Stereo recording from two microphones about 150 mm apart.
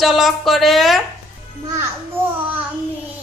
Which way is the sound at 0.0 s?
Centre (ahead or behind).